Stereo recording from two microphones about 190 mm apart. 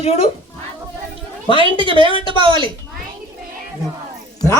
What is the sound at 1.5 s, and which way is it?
Speech, 25° left (ahead or behind).